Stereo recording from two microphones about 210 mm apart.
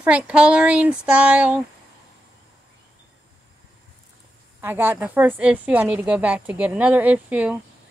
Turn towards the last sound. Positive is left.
turn(degrees=-5)  # may be behind; listen again after turning